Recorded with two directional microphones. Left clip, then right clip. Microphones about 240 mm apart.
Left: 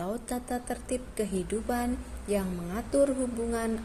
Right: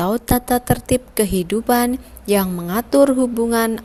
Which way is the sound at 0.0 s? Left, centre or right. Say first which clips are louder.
Right 15 dB; right.